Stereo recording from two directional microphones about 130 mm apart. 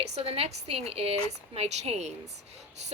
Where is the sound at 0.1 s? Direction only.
50° right (ahead or behind).